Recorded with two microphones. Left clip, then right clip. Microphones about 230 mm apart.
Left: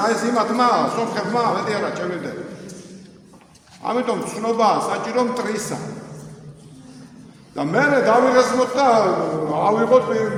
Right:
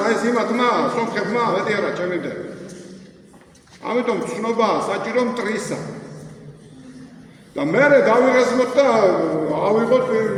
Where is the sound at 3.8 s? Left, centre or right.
Left.